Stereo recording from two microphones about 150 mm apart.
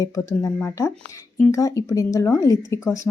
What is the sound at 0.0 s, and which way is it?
Speech, 20° left (ahead or behind).